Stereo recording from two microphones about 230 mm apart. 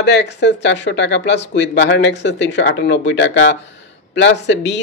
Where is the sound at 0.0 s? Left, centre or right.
Left.